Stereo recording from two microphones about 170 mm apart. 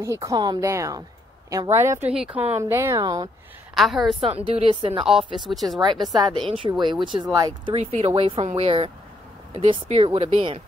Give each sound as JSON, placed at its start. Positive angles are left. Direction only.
{"t": 0.0, "sound": "speech", "side_deg": -20}
{"t": 3.7, "sound": "speech", "side_deg": 0}
{"t": 4.5, "sound": "speech", "side_deg": -30}
{"t": 5.0, "sound": "speech", "side_deg": -5}
{"t": 6.1, "sound": "speech", "side_deg": -25}
{"t": 7.7, "sound": "speech", "side_deg": -40}